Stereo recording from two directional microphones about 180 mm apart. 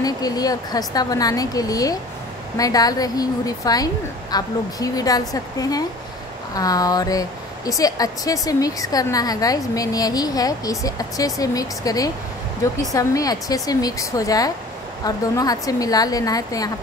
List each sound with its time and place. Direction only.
0.0 s speech: 20° left (ahead or behind)